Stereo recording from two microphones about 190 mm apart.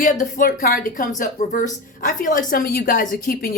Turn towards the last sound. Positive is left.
turn(degrees=45)  # may be behind; listen again after turning